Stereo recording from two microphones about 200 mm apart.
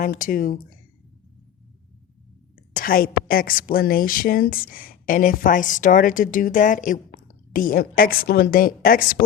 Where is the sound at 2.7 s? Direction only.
45° left (ahead or behind).